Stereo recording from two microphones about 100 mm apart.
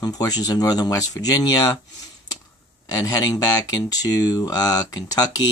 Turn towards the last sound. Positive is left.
turn(degrees=40)  # may be behind; listen again after turning